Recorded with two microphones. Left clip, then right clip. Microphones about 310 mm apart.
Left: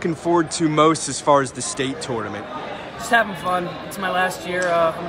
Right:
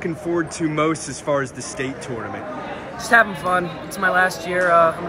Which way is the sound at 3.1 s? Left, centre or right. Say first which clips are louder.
Right 3 dB; centre.